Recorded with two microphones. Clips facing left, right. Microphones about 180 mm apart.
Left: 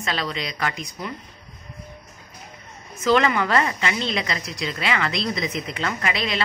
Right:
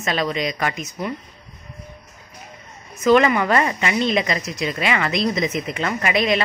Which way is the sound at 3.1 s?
15° right (ahead or behind).